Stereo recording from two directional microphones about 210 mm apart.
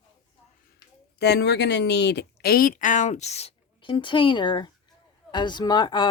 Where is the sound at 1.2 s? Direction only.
55° left (ahead or behind); by 6.0 s 20° left (ahead or behind).